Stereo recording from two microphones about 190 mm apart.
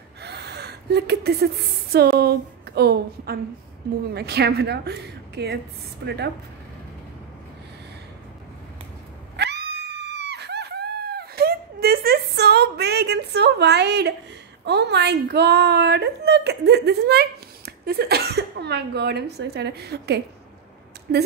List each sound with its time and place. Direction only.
0.2 s a woman's voice: 60° right (ahead or behind)
9.4 s a sound: 60° right (ahead or behind)
14.6 s a woman's voice: 60° right (ahead or behind)